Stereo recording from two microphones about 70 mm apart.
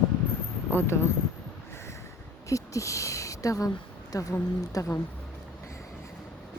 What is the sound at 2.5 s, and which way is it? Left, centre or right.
A woman's voice, left.